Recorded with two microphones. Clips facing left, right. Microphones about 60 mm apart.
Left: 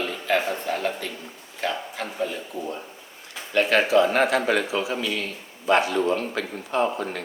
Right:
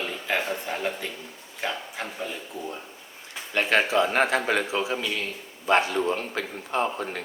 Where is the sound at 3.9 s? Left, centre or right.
Right.